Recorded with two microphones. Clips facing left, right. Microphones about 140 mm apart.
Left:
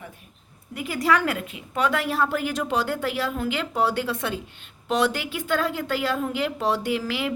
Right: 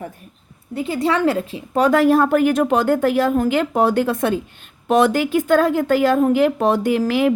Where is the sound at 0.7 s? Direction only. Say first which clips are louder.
Right 4 dB; 25° right (ahead or behind).